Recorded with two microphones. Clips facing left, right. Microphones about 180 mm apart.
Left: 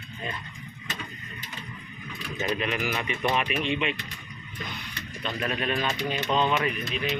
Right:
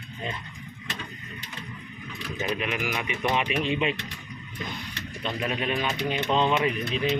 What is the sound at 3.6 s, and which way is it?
Speech, 35° right (ahead or behind).